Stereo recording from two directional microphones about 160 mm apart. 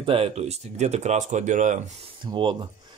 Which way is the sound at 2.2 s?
30° right (ahead or behind).